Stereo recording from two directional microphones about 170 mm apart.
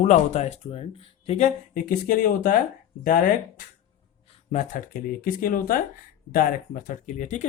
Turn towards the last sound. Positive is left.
turn(degrees=45)  # may be behind; listen again after turning